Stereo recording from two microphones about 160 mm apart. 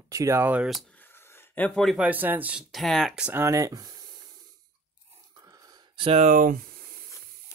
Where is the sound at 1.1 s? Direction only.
15° left (ahead or behind).